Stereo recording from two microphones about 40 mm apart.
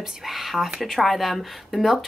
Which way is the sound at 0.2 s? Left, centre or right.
Centre.